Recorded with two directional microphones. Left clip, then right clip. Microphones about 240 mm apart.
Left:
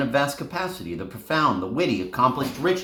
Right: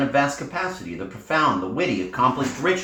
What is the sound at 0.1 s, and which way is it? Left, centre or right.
Speech, left.